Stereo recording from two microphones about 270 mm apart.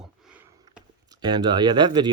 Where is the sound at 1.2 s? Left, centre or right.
Centre.